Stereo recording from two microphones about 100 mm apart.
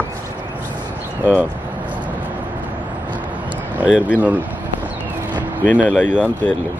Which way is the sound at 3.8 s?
10° right (ahead or behind).